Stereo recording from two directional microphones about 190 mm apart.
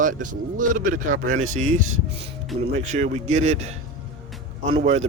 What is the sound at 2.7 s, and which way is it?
Speech, 40° right (ahead or behind).